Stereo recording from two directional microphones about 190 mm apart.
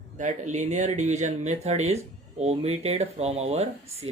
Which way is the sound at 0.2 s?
40° right (ahead or behind).